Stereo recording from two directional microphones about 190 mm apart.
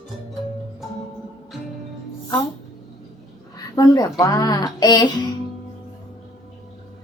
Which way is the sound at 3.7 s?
20° left (ahead or behind).